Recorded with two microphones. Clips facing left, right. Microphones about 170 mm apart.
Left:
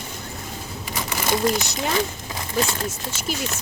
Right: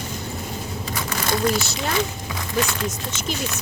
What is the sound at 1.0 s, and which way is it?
Crumpling, 15° left (ahead or behind).